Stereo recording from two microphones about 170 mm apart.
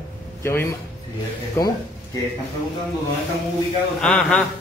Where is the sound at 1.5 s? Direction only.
20° left (ahead or behind).